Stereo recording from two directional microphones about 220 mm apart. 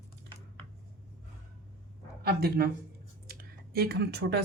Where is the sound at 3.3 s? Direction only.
45° right (ahead or behind).